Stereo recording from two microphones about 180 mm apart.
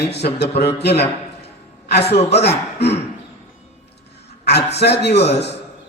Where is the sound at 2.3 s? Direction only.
70° left (ahead or behind).